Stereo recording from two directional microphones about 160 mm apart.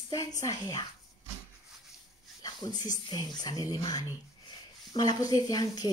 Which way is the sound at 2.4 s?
25° left (ahead or behind).